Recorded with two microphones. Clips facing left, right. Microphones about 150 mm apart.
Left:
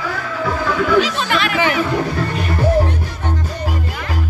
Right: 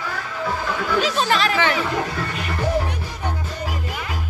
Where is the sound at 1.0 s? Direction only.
35° right (ahead or behind).